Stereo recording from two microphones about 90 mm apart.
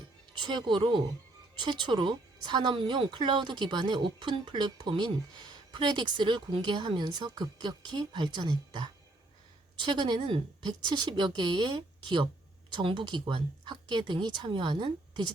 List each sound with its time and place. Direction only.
0.3 s a woman's voice: 60° right (ahead or behind); by 10.7 s 80° right
10.7 s a woman's voice: 55° right (ahead or behind)